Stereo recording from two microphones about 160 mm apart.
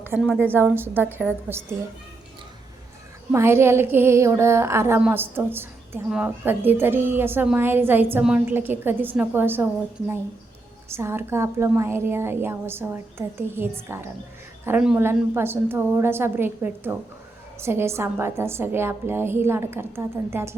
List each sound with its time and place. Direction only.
0.3 s a woman's voice: 15° right (ahead or behind)
3.3 s a woman's voice: 15° right (ahead or behind)
10.8 s a woman's voice: 15° right (ahead or behind)